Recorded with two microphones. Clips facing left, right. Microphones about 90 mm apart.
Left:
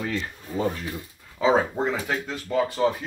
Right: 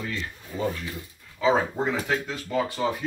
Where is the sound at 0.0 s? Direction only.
60° left (ahead or behind).